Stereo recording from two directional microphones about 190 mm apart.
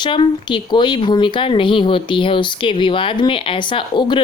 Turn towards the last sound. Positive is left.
turn(degrees=25)  # may be behind; listen again after turning